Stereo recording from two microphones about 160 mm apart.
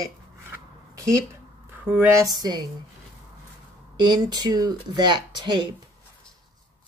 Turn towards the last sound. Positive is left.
turn(degrees=-30)  # may be behind; listen again after turning